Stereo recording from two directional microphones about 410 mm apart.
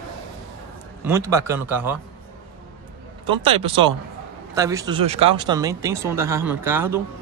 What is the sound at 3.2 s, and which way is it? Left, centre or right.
Speech, centre.